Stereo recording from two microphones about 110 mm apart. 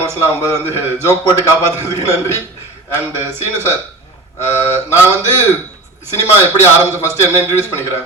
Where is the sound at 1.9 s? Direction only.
25° right (ahead or behind).